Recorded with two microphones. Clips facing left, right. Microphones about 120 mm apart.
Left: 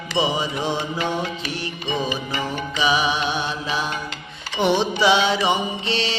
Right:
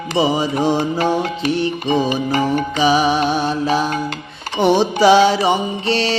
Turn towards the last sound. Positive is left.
turn(degrees=-40)  # may be behind; listen again after turning